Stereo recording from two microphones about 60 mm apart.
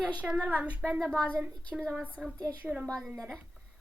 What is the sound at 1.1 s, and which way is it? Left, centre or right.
Speech, centre.